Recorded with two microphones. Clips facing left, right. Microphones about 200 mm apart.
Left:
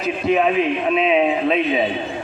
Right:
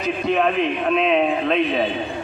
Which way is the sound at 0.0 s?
5° left (ahead or behind).